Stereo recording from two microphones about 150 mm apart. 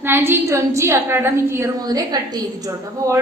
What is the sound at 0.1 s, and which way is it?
A woman's voice, 15° right (ahead or behind).